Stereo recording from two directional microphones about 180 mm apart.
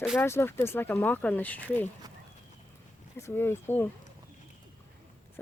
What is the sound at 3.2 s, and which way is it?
Speech, 10° left (ahead or behind).